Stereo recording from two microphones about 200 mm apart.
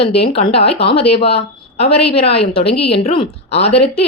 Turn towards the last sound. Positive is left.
turn(degrees=30)  # may be behind; listen again after turning